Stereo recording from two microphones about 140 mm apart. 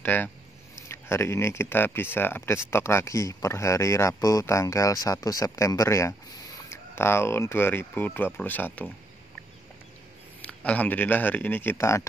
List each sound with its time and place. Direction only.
0.0 s speech: 15° left (ahead or behind)
10.4 s speech: 10° left (ahead or behind)